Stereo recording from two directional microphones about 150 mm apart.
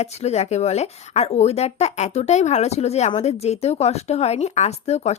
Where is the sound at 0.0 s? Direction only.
45° left (ahead or behind).